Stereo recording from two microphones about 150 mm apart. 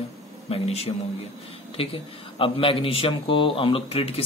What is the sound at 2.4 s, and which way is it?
Speech, 35° left (ahead or behind).